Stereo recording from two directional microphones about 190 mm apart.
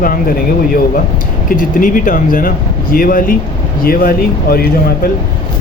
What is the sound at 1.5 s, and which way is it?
Speech, 45° left (ahead or behind).